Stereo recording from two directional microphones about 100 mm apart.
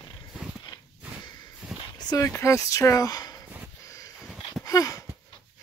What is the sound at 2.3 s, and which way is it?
Speech, 30° left (ahead or behind).